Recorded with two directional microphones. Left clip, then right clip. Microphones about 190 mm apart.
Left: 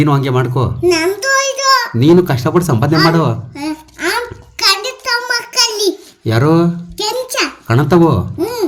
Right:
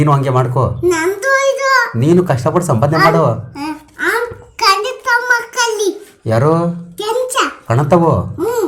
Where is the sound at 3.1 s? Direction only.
20° left (ahead or behind).